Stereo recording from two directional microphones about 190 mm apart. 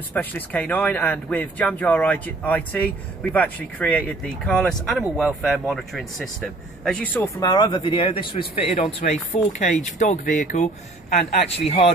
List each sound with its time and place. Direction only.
0.1 s speech: 10° left (ahead or behind); by 11.9 s 30° left (ahead or behind)